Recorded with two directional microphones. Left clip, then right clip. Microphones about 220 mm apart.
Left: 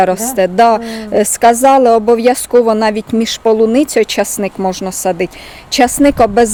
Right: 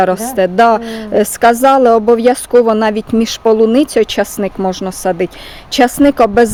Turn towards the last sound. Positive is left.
turn(degrees=-15)  # may be behind; listen again after turning